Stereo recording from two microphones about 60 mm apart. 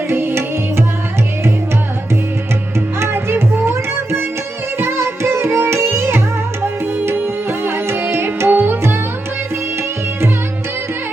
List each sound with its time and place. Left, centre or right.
0.1 s music: right
3.0 s music: right
7.6 s music: right
8.4 s music: right